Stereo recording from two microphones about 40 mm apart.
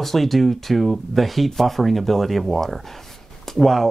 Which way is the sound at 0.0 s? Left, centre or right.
Centre.